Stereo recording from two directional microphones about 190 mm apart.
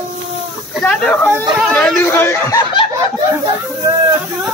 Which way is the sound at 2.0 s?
15° left (ahead or behind).